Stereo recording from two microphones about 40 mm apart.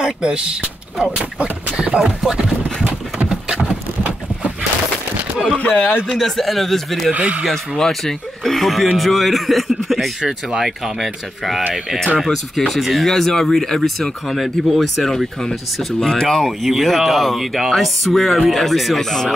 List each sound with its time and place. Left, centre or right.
0.0 s speech: centre
3.3 s vehicle: right
5.6 s speech: left
6.1 s speech: centre
7.2 s speech: right
7.4 s speech: centre
13.0 s speech: centre
16.0 s speech: centre
16.4 s speech: centre